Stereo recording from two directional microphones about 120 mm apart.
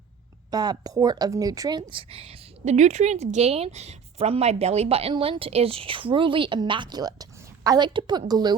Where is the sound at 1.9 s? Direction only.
50° right (ahead or behind).